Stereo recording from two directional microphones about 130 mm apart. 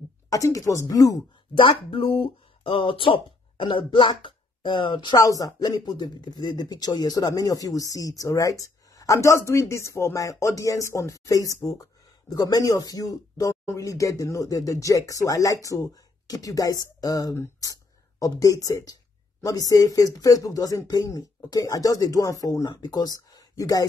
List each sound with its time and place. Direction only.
0.3 s speech: 25° left (ahead or behind)
1.6 s speech: 40° left (ahead or behind)